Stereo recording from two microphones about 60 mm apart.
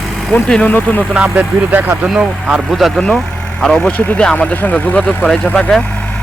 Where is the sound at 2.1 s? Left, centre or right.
Centre.